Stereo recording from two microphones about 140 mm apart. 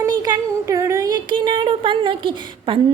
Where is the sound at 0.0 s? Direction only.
25° right (ahead or behind).